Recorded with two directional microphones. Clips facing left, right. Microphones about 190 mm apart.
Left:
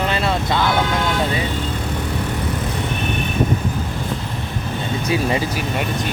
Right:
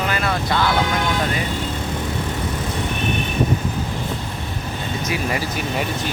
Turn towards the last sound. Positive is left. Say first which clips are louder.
# left 4 dB
turn(degrees=25)  # may be behind; listen again after turning